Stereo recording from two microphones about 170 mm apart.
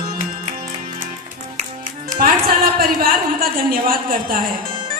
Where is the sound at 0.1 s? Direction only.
55° right (ahead or behind).